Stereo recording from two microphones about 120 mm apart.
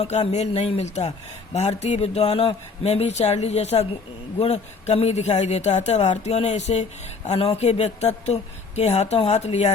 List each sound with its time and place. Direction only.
0.3 s speech: 65° left (ahead or behind)